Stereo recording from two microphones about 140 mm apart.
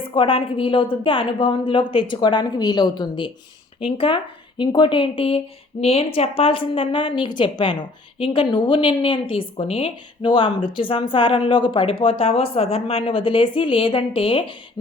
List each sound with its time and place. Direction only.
0.1 s a woman's voice: 40° left (ahead or behind)